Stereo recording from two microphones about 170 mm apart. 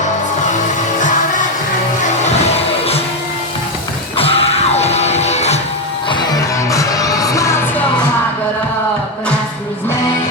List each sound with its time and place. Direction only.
0.9 s music: 50° left (ahead or behind)
4.2 s music: 35° left (ahead or behind)
6.7 s music: 20° left (ahead or behind)